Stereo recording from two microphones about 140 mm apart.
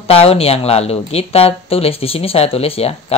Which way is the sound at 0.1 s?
45° left (ahead or behind).